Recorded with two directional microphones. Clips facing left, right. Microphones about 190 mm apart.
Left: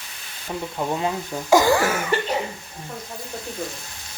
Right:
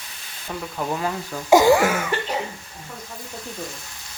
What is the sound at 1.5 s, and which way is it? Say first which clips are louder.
Speech: right 3 dB; 20° right (ahead or behind).